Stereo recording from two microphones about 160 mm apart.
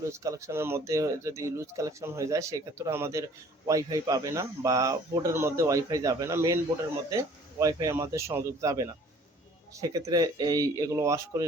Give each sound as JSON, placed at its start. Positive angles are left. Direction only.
{"t": 0.1, "sound": "speech", "side_deg": -20}